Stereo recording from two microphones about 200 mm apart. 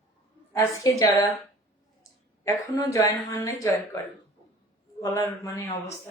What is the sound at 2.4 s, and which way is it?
A woman's voice, 15° left (ahead or behind).